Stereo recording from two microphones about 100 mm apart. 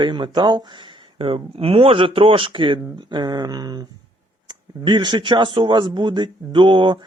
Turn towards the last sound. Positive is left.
turn(degrees=-55)  # may be behind; listen again after turning